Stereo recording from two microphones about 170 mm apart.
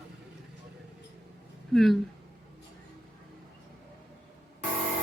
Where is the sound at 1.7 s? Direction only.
Centre (ahead or behind).